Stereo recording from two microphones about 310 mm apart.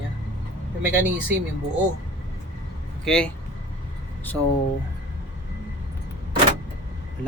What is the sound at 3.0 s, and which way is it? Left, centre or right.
Speech, centre.